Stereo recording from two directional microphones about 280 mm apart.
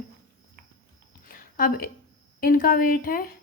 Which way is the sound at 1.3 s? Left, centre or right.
Left.